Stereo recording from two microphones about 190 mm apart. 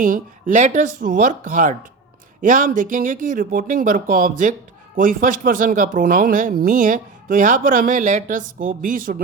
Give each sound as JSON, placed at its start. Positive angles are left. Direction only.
{"t": 0.0, "sound": "speech", "side_deg": -45}